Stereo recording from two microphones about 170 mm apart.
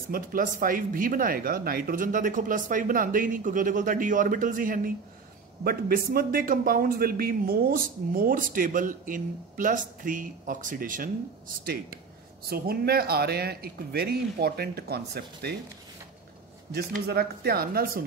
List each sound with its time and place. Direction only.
0.1 s a man's voice: 55° right (ahead or behind)
16.7 s a man's voice: 65° right (ahead or behind)